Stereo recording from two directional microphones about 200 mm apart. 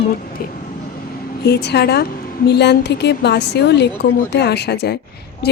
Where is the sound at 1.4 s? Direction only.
55° left (ahead or behind).